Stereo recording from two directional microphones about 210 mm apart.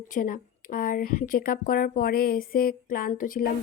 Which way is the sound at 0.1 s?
40° left (ahead or behind).